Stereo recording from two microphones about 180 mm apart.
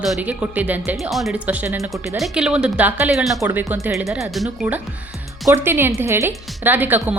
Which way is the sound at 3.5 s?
10° right (ahead or behind).